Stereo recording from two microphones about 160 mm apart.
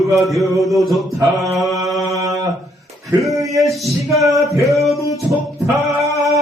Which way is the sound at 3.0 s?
Centre (ahead or behind).